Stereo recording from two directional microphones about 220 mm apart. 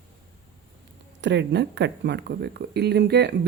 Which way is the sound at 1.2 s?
50° right (ahead or behind).